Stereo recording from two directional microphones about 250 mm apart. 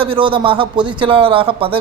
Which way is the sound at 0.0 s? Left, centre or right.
Right.